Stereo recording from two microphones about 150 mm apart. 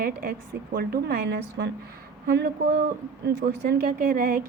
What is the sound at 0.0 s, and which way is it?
A woman's voice, 75° right (ahead or behind).